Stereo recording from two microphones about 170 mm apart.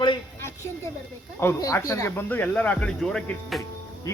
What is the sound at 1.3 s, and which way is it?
Speech, 15° left (ahead or behind).